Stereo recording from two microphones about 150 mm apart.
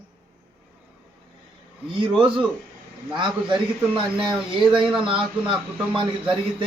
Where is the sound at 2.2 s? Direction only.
35° right (ahead or behind).